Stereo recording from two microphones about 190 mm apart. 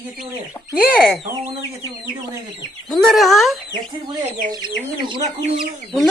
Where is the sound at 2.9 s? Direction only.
Centre (ahead or behind).